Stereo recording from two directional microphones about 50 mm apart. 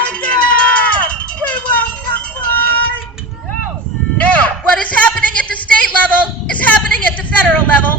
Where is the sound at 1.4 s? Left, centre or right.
Left.